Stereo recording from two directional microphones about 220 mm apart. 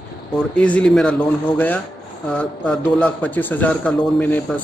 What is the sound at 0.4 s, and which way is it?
Speech, 5° left (ahead or behind).